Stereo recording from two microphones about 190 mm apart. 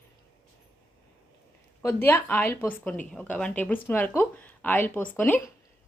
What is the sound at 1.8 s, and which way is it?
A woman's voice, 10° left (ahead or behind).